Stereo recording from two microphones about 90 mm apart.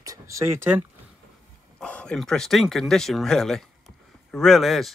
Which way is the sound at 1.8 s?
10° left (ahead or behind).